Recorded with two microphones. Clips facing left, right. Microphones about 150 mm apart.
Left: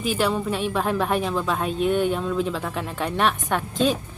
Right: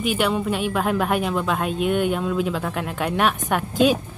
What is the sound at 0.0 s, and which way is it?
Speech, centre (ahead or behind).